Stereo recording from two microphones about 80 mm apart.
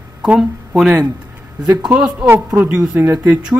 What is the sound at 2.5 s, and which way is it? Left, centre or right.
Speech, centre.